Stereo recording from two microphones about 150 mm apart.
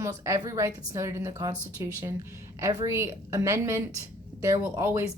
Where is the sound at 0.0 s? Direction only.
20° right (ahead or behind).